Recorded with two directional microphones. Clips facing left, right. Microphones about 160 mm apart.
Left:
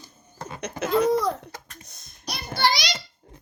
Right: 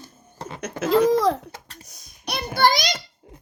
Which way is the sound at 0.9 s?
90° right.